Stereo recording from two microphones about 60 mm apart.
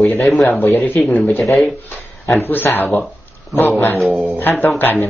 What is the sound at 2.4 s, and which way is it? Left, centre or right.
Speech, left.